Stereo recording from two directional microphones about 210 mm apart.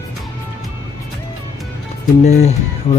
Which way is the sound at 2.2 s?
30° left (ahead or behind).